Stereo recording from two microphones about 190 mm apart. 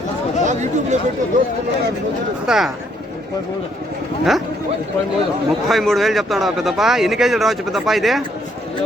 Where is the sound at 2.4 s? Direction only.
Centre (ahead or behind).